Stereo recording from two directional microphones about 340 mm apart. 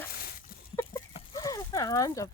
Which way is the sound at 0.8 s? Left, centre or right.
Centre.